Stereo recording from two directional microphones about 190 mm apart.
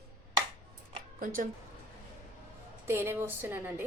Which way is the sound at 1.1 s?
45° right (ahead or behind).